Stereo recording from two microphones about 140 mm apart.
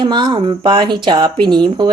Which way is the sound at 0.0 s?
35° right (ahead or behind).